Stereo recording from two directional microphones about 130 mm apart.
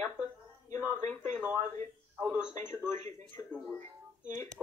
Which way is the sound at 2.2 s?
10° right (ahead or behind).